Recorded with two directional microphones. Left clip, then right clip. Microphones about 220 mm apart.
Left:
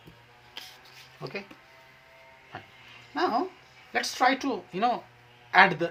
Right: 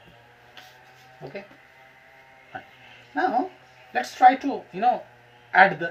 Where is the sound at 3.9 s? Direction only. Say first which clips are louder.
Right 7 dB; 25° left (ahead or behind).